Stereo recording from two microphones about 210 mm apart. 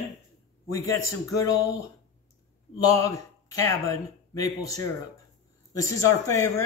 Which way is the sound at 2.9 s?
15° left (ahead or behind).